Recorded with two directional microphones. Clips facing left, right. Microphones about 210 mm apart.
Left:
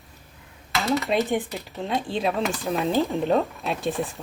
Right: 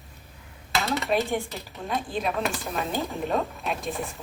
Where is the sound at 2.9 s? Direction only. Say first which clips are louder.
Left 6 dB; centre (ahead or behind).